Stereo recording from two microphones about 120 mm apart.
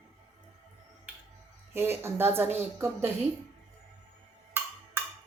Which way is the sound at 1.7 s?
20° right (ahead or behind).